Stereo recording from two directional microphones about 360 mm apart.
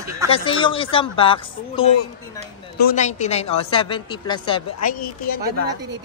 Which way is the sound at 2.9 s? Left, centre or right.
Centre.